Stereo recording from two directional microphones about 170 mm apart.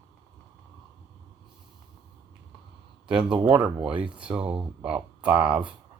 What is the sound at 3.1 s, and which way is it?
Speech, 5° right (ahead or behind).